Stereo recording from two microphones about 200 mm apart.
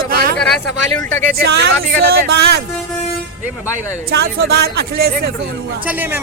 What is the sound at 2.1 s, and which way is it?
Speech, 55° right (ahead or behind).